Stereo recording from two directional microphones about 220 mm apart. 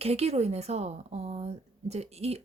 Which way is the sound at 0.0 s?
30° right (ahead or behind).